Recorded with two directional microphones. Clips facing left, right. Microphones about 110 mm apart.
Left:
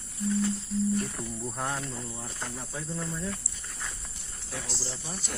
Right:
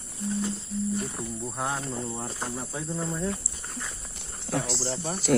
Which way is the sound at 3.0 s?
30° right (ahead or behind).